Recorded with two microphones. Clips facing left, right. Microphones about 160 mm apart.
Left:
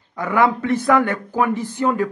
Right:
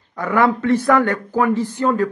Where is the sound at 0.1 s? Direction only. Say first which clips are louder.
Right 1 dB; 15° left (ahead or behind).